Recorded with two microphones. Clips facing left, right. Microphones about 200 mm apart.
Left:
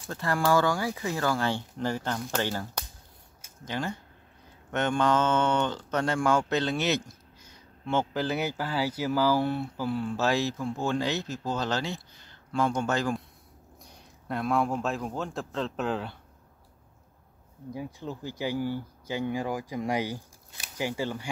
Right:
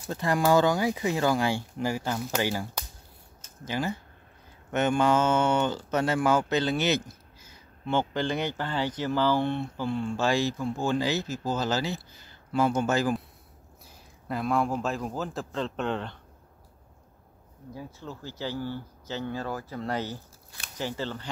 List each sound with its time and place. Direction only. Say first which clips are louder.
0.1 s a man's voice: right 2 dB; 20° right (ahead or behind); by 16.2 s 5° left (ahead or behind)
17.7 s speech: left 4 dB; 15° left (ahead or behind)